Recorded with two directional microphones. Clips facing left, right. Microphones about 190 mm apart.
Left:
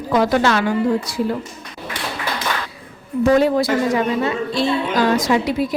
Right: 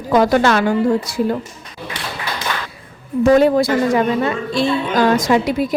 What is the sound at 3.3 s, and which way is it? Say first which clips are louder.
Speech: right 3 dB; 50° right (ahead or behind).